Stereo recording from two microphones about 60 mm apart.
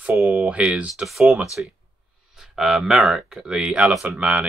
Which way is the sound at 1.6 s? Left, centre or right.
Centre.